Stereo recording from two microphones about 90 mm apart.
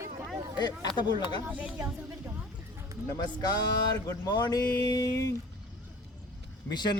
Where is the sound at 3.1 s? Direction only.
50° left (ahead or behind).